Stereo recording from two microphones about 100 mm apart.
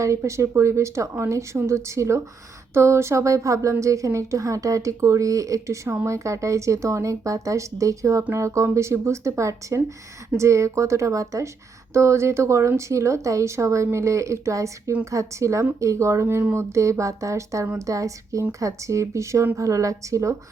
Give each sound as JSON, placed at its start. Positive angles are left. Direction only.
{"t": 0.0, "sound": "a woman's voice", "side_deg": -30}